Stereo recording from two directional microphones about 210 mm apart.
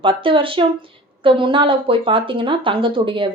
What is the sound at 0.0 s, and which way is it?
A woman's voice, 25° right (ahead or behind).